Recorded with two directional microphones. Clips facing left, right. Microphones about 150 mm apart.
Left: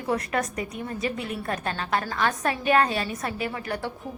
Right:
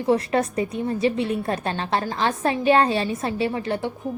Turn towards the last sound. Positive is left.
turn(degrees=-25)  # may be behind; listen again after turning